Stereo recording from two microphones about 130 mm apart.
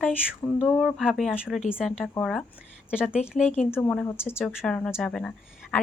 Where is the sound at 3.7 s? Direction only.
15° left (ahead or behind).